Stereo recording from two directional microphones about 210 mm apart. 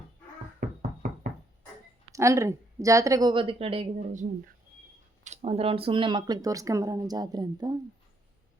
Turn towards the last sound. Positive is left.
turn(degrees=-20)  # may be behind; listen again after turning